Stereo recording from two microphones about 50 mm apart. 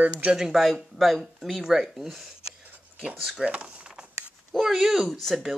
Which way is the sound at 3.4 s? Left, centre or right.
Right.